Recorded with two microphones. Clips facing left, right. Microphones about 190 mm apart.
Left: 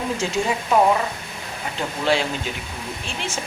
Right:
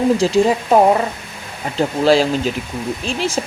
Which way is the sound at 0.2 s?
35° right (ahead or behind).